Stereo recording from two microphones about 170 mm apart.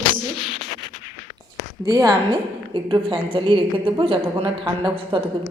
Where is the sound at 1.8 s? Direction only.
20° right (ahead or behind).